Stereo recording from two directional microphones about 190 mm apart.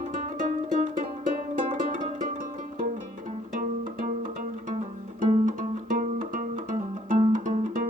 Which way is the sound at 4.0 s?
45° right (ahead or behind).